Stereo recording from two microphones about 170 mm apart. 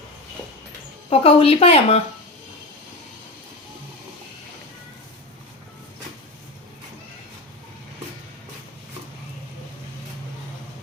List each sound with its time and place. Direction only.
1.1 s speech: 35° left (ahead or behind)